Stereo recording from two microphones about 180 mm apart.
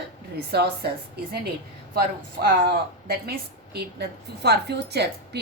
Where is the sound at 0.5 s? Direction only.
60° right (ahead or behind).